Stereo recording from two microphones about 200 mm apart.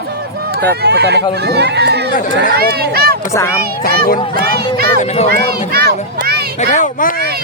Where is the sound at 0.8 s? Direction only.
55° right (ahead or behind).